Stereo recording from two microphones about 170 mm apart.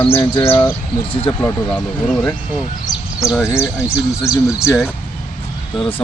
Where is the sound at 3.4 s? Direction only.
15° left (ahead or behind).